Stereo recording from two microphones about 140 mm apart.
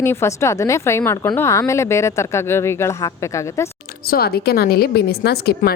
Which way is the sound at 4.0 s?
90° left.